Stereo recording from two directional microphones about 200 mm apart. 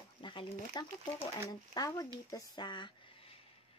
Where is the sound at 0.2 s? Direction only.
25° left (ahead or behind).